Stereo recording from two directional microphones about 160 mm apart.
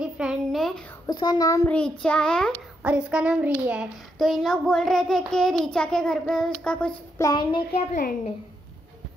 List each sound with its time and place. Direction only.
0.0 s a child's voice: 5° right (ahead or behind)
1.0 s a child's voice: 25° left (ahead or behind)
1.7 s a child's voice: 5° left (ahead or behind)
2.8 s a child's voice: 10° right (ahead or behind)
7.2 s a child's voice: 25° left (ahead or behind)
7.9 s a woman's voice: 60° left (ahead or behind)